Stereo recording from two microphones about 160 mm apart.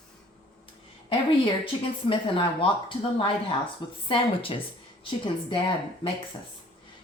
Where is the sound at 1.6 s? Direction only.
35° left (ahead or behind).